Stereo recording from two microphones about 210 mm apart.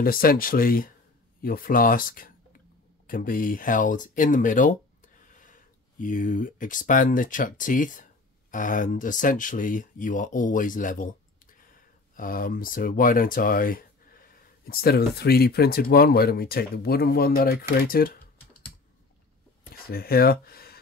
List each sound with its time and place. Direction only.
0.0 s speech: 45° left (ahead or behind)
19.7 s speech: 45° left (ahead or behind)